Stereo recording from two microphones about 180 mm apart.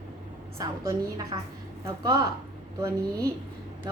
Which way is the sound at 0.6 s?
20° right (ahead or behind).